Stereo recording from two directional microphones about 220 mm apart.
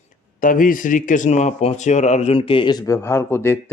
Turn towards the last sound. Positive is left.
turn(degrees=10)  # may be behind; listen again after turning